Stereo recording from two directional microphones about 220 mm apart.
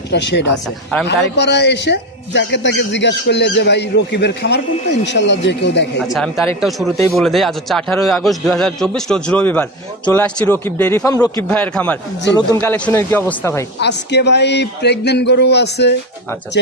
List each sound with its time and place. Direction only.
0.1 s a man's voice: 50° left (ahead or behind)
6.1 s a man's voice: centre (ahead or behind)
13.7 s a man's voice: 50° left (ahead or behind)